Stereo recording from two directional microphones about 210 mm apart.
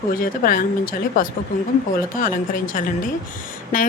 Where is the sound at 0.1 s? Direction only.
40° left (ahead or behind).